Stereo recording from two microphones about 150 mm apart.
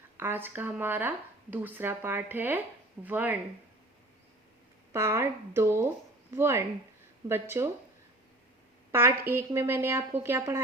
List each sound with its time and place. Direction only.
0.2 s speech: 15° right (ahead or behind)
4.9 s speech: 15° right (ahead or behind)
8.9 s speech: 15° right (ahead or behind)